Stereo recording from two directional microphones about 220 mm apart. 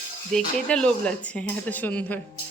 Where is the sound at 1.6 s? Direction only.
5° left (ahead or behind).